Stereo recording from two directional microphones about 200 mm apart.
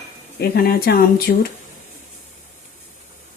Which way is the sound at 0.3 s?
50° left (ahead or behind).